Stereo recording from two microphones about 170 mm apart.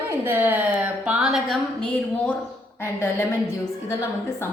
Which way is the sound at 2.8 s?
15° left (ahead or behind).